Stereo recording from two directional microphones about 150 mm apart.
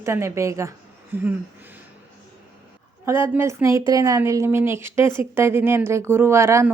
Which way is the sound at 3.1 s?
15° right (ahead or behind).